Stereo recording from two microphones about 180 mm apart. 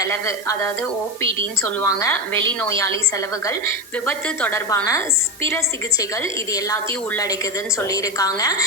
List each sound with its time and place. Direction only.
0.0 s a woman's voice: 15° left (ahead or behind)
1.6 s a woman's voice: 15° left (ahead or behind)
4.0 s a woman's voice: 10° left (ahead or behind)
7.9 s a woman's voice: 20° left (ahead or behind)